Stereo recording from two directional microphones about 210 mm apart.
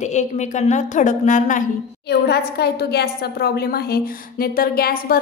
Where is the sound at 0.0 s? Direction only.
35° left (ahead or behind).